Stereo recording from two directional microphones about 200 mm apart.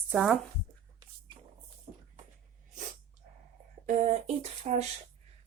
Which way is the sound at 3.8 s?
30° right (ahead or behind).